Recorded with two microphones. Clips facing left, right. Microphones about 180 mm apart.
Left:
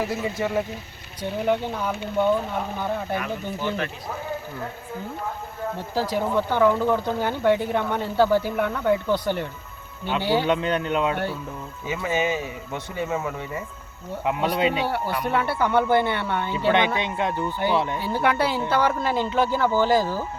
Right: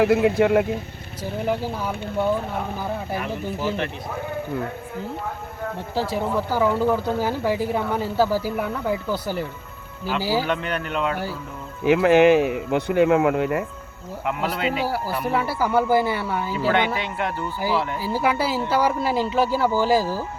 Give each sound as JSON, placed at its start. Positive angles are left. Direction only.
{"t": 0.0, "sound": "speech", "side_deg": -65}
{"t": 1.2, "sound": "speech", "side_deg": -5}
{"t": 5.7, "sound": "speech", "side_deg": 0}
{"t": 10.4, "sound": "speech", "side_deg": 20}
{"t": 11.9, "sound": "speech", "side_deg": -75}
{"t": 14.8, "sound": "speech", "side_deg": -5}
{"t": 16.7, "sound": "speech", "side_deg": 20}
{"t": 17.9, "sound": "speech", "side_deg": -5}